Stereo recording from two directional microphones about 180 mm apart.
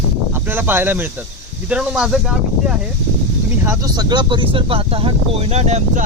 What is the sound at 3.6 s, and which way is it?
Speech, 15° right (ahead or behind).